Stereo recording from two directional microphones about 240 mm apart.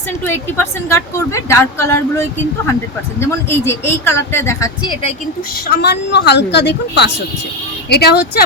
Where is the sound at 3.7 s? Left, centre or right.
Centre.